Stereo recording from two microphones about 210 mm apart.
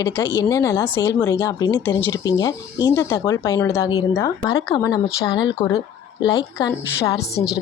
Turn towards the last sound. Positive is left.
turn(degrees=15)  # may be behind; listen again after turning